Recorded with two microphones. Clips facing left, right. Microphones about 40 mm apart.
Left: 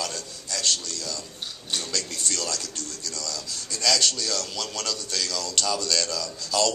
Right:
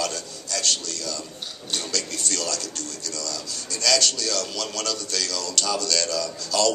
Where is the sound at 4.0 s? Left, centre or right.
Left.